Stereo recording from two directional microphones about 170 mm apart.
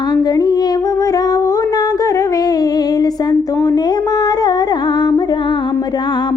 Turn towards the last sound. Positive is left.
turn(degrees=25)  # may be behind; listen again after turning